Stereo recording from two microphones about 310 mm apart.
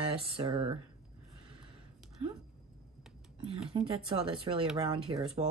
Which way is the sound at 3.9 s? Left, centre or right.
Centre.